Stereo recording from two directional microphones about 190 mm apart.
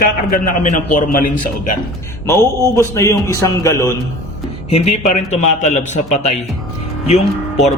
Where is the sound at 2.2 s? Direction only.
15° left (ahead or behind).